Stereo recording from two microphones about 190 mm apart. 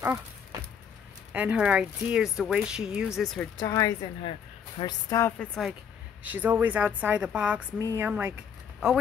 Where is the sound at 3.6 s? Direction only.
15° left (ahead or behind).